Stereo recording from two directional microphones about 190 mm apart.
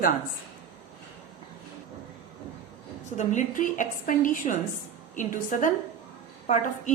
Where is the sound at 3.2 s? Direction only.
40° left (ahead or behind).